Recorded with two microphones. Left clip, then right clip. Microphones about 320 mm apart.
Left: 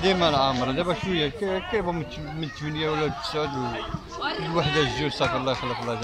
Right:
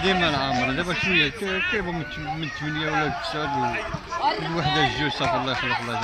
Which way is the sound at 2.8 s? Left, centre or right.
Centre.